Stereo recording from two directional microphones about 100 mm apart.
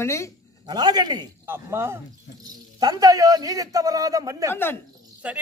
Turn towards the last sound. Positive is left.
turn(degrees=-15)  # may be behind; listen again after turning